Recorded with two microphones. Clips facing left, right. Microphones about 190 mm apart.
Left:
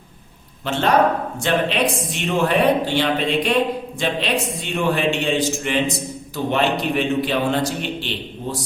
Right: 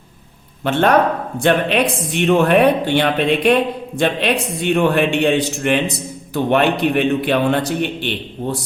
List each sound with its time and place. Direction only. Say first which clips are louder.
0.6 s a man's voice: right 3 dB; 60° right (ahead or behind)